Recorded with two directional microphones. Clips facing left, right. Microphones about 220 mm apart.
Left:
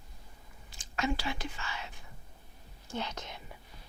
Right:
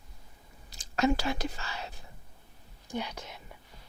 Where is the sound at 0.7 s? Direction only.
40° right (ahead or behind).